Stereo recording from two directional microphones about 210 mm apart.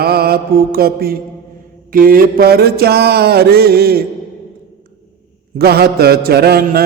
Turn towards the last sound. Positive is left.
turn(degrees=-50)  # may be behind; listen again after turning